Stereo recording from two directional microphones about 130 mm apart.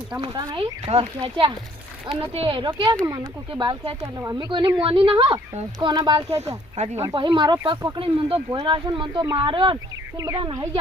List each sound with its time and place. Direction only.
0.2 s speech: 40° right (ahead or behind)
4.0 s speech: 25° right (ahead or behind)
4.4 s a woman's voice: 35° right (ahead or behind)
6.8 s speech: 60° right (ahead or behind)
7.1 s speech: 35° right (ahead or behind)
7.9 s a woman's voice: 45° right (ahead or behind)
10.2 s speech: 25° right (ahead or behind)